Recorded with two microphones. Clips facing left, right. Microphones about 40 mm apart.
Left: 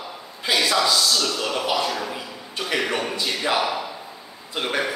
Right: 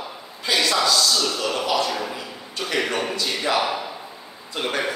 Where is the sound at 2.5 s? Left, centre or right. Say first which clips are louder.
Even; centre.